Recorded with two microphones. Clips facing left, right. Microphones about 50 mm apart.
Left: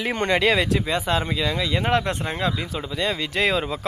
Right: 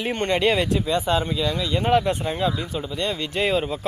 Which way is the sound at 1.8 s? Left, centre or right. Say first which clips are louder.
Right 5 dB; left.